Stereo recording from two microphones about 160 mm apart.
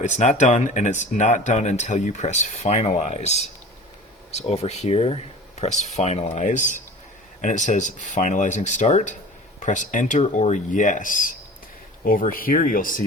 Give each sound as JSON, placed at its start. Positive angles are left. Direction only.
{"t": 0.0, "sound": "speech", "side_deg": 50}